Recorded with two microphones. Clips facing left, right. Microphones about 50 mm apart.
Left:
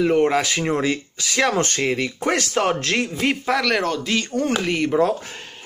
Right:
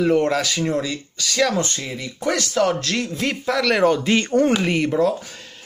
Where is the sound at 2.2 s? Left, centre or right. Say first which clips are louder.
Right 1 dB; left; by 3.6 s centre.